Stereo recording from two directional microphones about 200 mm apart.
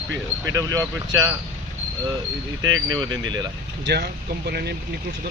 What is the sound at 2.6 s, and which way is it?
Speech, 80° right.